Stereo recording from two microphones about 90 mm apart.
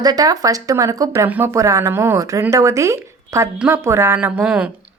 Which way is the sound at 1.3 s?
20° right (ahead or behind).